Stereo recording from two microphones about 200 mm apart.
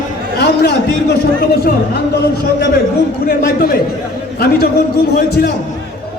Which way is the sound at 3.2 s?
50° left (ahead or behind).